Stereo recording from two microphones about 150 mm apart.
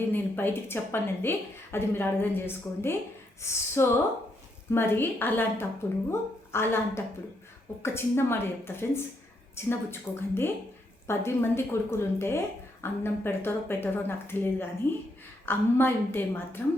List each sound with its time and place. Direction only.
0.1 s a woman's voice: 15° left (ahead or behind)
4.7 s a woman's voice: 15° left (ahead or behind)